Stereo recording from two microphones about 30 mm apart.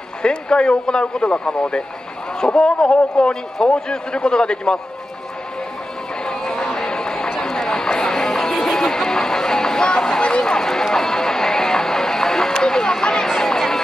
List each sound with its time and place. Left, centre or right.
0.2 s a man's voice: left
1.2 s a man's voice: left
6.2 s a sound: left
7.3 s music: left